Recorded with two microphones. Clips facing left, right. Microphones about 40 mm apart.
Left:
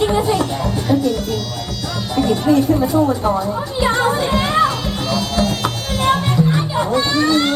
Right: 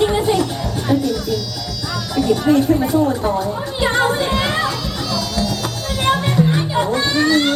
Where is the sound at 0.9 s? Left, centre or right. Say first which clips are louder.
Even; left.